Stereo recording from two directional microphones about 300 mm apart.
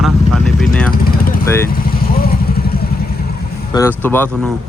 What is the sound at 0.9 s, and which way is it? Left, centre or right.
Vehicle, left.